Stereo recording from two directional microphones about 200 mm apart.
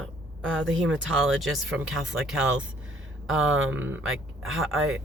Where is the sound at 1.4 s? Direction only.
Centre (ahead or behind).